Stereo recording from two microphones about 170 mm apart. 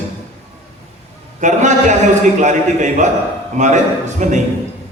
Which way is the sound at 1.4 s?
45° right (ahead or behind).